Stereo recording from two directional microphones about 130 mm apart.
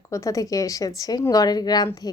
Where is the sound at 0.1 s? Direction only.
25° left (ahead or behind).